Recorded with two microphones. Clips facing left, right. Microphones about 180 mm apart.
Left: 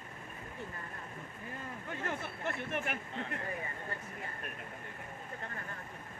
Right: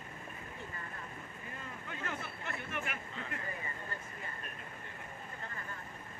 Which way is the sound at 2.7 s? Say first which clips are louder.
Left 4 dB; 50° left (ahead or behind).